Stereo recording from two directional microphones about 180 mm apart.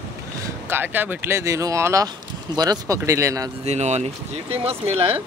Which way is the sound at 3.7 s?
40° right (ahead or behind).